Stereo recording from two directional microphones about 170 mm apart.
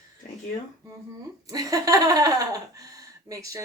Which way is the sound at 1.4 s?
20° right (ahead or behind).